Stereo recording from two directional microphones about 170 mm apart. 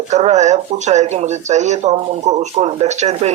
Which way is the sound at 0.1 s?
40° right (ahead or behind).